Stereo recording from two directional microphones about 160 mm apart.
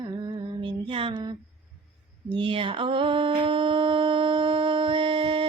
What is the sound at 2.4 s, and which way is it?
Mantra, 30° right (ahead or behind).